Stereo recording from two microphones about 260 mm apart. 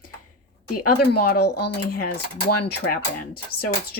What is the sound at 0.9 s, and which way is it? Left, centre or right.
Speech, left.